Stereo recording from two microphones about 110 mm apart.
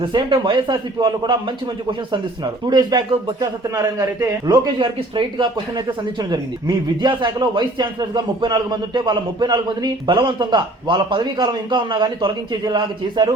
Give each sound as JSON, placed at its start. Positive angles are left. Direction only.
{"t": 0.0, "sound": "speech", "side_deg": -45}